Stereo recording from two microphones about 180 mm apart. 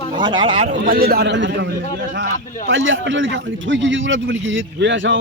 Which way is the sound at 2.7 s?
90° right.